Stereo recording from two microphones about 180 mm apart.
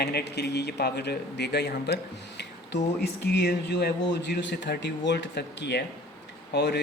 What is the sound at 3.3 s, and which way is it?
Speech, 65° left (ahead or behind).